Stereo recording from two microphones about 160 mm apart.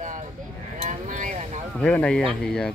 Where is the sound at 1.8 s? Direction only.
5° left (ahead or behind).